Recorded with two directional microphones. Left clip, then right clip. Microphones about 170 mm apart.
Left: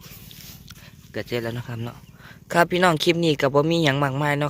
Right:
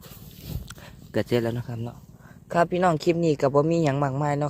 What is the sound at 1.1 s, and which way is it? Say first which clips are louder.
Speech: right 3 dB; 35° right (ahead or behind).